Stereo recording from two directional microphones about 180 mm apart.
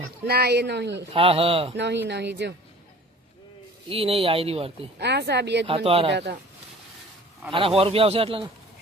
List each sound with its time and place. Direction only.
0.3 s speech: 60° right (ahead or behind)
1.1 s speech: 30° right (ahead or behind)
1.7 s speech: 75° right (ahead or behind)
3.8 s speech: 30° right (ahead or behind)
4.9 s speech: 70° right (ahead or behind)
5.6 s speech: 30° right (ahead or behind)
7.8 s speech: 30° right (ahead or behind)